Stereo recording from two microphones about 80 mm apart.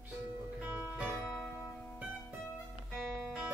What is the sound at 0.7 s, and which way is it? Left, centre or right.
Music, right.